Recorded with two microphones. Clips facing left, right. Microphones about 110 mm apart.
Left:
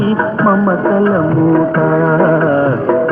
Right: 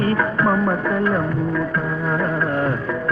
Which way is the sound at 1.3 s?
55° left (ahead or behind).